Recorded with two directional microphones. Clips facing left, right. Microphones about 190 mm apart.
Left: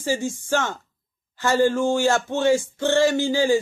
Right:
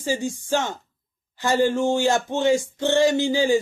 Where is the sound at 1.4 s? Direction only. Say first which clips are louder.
Left 1 dB; 15° right (ahead or behind).